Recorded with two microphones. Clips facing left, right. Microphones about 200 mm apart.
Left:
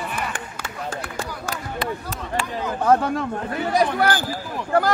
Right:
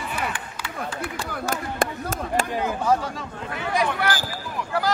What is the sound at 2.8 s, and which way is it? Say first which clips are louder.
Speech: left 8 dB; 60° left (ahead or behind).